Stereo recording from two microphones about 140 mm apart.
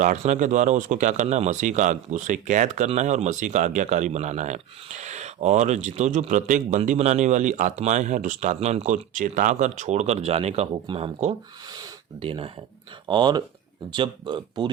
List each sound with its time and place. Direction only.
0.2 s a man's voice: 60° right (ahead or behind)
9.1 s a man's voice: 65° right (ahead or behind); by 10.7 s 50° right (ahead or behind)
10.8 s speech: 40° right (ahead or behind)
12.2 s speech: 40° right (ahead or behind)